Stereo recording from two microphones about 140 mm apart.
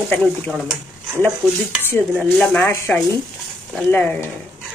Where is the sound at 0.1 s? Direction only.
10° left (ahead or behind).